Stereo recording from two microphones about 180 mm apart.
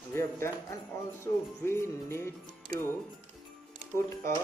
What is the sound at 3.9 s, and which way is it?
Speech, 15° left (ahead or behind).